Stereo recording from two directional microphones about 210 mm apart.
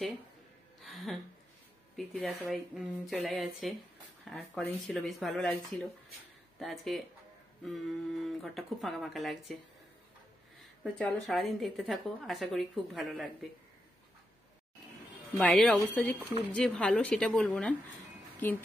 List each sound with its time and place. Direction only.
2.0 s a woman's voice: 5° left (ahead or behind)
10.8 s a woman's voice: 5° left (ahead or behind)
15.3 s a woman's voice: centre (ahead or behind)